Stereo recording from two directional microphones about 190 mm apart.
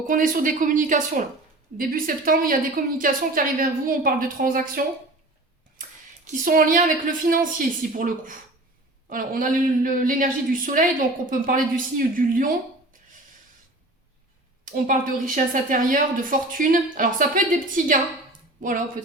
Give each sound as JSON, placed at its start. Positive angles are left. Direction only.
{"t": 0.0, "sound": "a woman's voice", "side_deg": -45}
{"t": 6.2, "sound": "a woman's voice", "side_deg": -45}
{"t": 14.6, "sound": "a woman's voice", "side_deg": -45}